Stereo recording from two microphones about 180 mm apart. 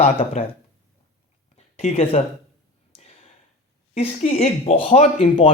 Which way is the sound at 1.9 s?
30° left (ahead or behind).